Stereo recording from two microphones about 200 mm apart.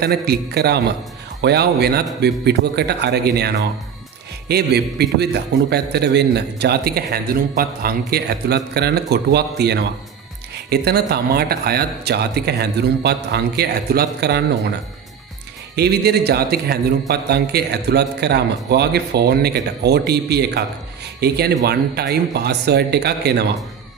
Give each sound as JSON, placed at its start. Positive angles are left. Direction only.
{"t": 0.0, "sound": "a man's voice", "side_deg": -50}
{"t": 15.7, "sound": "a man's voice", "side_deg": -55}